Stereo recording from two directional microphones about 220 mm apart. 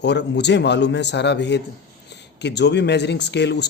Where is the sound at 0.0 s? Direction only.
50° left (ahead or behind).